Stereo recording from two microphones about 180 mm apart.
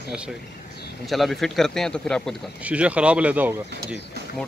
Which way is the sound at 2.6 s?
5° right (ahead or behind).